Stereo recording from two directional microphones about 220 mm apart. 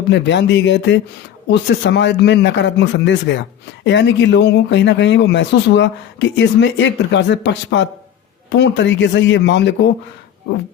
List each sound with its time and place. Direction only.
0.1 s speech: 55° left (ahead or behind)